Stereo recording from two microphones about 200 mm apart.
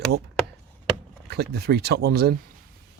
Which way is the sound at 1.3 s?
55° right (ahead or behind).